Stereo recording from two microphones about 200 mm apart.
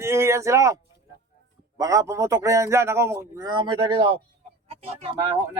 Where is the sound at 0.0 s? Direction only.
15° right (ahead or behind).